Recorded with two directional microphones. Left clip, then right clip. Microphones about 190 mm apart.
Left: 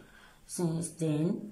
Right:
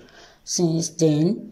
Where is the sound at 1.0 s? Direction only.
25° right (ahead or behind).